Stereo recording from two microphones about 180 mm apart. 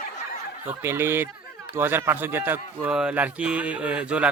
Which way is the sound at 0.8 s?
15° right (ahead or behind).